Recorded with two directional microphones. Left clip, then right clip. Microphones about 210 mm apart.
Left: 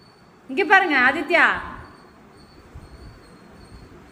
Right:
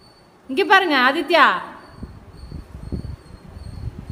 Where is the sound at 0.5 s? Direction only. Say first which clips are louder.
Right 1 dB; 30° right (ahead or behind).